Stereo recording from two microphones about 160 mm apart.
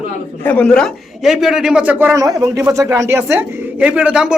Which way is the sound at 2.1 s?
20° right (ahead or behind).